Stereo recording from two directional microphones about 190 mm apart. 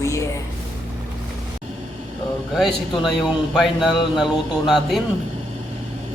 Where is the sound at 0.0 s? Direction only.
15° left (ahead or behind).